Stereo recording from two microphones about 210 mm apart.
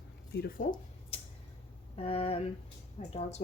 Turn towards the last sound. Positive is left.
turn(degrees=30)  # may be behind; listen again after turning